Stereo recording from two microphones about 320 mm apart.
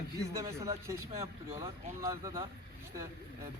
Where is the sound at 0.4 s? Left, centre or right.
Centre.